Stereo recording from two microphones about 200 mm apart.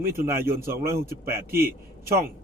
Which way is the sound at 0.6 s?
45° right (ahead or behind).